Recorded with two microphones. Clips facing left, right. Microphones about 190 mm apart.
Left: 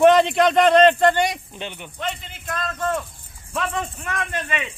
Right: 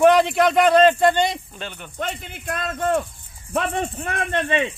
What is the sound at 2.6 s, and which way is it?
Speech, 25° right (ahead or behind).